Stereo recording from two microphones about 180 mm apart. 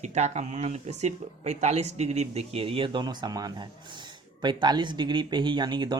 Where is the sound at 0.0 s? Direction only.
40° right (ahead or behind).